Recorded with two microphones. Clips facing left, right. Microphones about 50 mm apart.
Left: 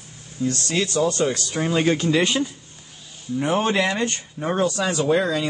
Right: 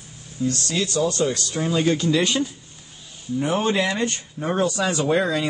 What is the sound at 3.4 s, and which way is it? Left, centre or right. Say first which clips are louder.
Speech: left 1 dB; left.